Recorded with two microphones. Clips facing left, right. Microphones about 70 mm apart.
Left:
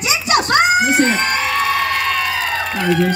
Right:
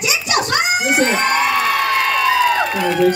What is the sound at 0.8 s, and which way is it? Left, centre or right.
Speech, centre.